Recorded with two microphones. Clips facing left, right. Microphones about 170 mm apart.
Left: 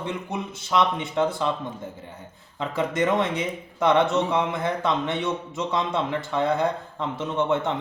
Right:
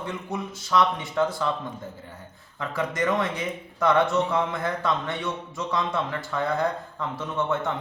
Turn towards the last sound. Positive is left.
turn(degrees=25)  # may be behind; listen again after turning